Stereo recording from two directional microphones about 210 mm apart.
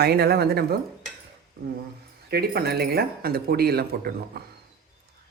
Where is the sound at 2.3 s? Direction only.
50° right (ahead or behind).